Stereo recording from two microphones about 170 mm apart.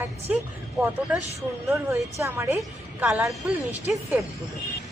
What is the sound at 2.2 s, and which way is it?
Speech, 15° right (ahead or behind).